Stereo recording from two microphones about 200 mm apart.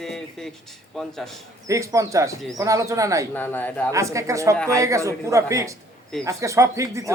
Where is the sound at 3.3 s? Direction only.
10° left (ahead or behind).